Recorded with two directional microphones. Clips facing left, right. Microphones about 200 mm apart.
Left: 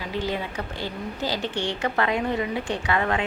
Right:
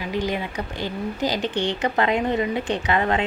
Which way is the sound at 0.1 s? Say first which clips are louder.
Right 3 dB; 15° right (ahead or behind).